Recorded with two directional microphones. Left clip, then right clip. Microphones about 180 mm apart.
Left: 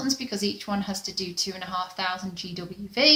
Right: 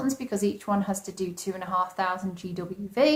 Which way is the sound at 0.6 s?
20° left (ahead or behind).